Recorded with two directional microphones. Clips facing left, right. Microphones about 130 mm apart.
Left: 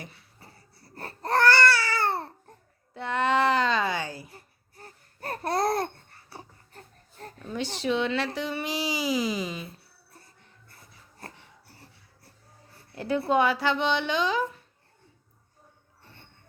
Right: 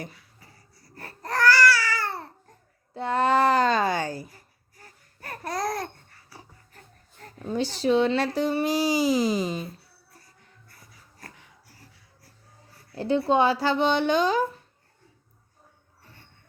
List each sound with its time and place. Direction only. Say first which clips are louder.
0.1 s babbling: left 1 dB; 30° left (ahead or behind)
2.9 s speech: right 3 dB; 35° right (ahead or behind)
4.3 s babbling: left 3 dB; 30° left (ahead or behind)
6.3 s pig: left 4 dB; 35° left (ahead or behind)
7.3 s speech: right 5 dB; 35° right (ahead or behind)
10.7 s a sound: left 1 dB; 25° left (ahead or behind)
13.0 s speech: right 2 dB; 25° right (ahead or behind)